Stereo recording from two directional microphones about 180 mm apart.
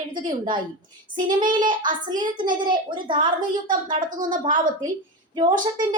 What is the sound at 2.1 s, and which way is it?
A woman's voice, 25° right (ahead or behind).